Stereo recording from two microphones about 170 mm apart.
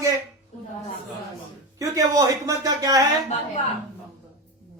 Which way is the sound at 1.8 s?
20° right (ahead or behind).